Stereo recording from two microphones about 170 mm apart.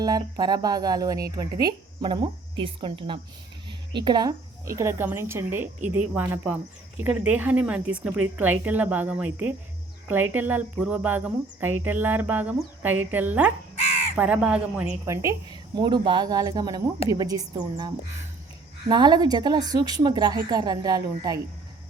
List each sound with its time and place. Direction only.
0.0 s speech: 20° right (ahead or behind)